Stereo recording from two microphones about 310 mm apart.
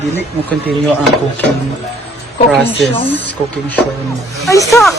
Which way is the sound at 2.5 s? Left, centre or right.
Centre.